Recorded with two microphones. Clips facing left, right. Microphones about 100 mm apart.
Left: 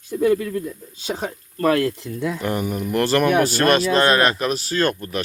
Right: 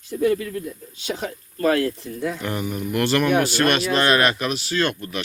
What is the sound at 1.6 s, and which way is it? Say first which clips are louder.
Speech: left 1 dB; 65° left (ahead or behind).